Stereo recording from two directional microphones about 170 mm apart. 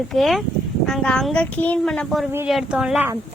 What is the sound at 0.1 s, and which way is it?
Speech, centre (ahead or behind).